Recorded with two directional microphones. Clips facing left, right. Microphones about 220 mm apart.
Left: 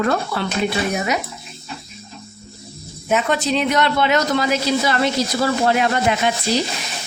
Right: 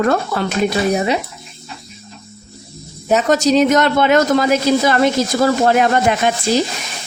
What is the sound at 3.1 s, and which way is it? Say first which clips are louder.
Speech: right 6 dB; 40° right (ahead or behind).